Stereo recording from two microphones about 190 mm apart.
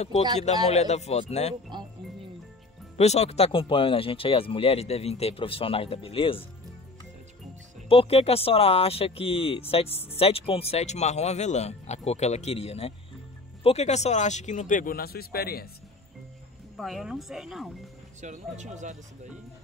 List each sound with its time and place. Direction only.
0.7 s speech: 35° left (ahead or behind)
1.7 s music: 25° right (ahead or behind)
3.0 s speech: 35° left (ahead or behind)
7.9 s speech: 30° left (ahead or behind); by 15.7 s 55° left (ahead or behind)
16.7 s speech: centre (ahead or behind)
18.2 s speech: 40° right (ahead or behind)